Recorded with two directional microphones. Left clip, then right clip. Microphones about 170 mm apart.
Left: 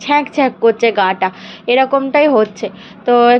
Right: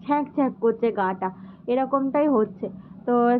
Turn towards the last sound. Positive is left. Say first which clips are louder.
# left 11 dB
turn(degrees=15)  # may be behind; listen again after turning